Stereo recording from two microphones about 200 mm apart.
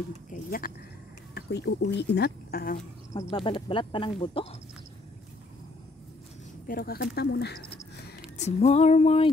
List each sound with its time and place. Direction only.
0.3 s speech: 45° left (ahead or behind)
1.3 s speech: 55° left (ahead or behind)
3.1 s speech: 20° left (ahead or behind)
6.7 s speech: 50° left (ahead or behind)
8.4 s female singing: 35° left (ahead or behind)